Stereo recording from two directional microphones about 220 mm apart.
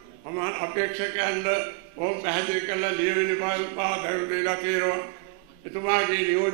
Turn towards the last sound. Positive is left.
turn(degrees=-15)  # may be behind; listen again after turning